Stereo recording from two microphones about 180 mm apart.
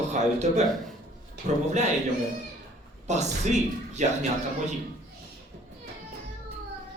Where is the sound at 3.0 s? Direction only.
40° right (ahead or behind).